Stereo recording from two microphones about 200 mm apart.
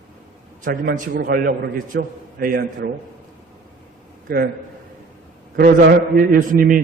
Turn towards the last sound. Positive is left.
turn(degrees=-45)  # may be behind; listen again after turning